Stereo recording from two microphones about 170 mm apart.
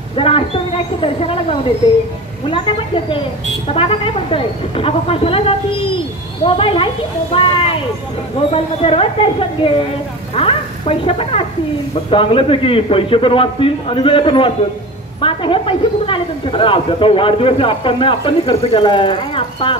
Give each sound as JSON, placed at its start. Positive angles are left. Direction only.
{"t": 0.1, "sound": "a woman's voice", "side_deg": 35}